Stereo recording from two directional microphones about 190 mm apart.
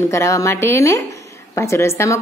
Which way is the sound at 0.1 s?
15° left (ahead or behind).